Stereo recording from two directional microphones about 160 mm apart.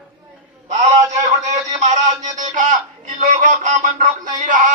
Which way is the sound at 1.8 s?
50° right (ahead or behind).